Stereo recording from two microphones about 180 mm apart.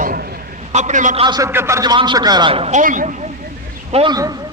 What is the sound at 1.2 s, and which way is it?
A man's voice, 20° right (ahead or behind).